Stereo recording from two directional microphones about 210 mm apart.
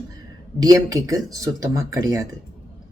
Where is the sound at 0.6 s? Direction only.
15° right (ahead or behind).